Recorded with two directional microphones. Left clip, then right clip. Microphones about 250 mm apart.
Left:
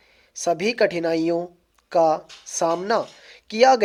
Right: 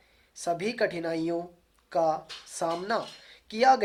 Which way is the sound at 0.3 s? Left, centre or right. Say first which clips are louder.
Left 8 dB; left.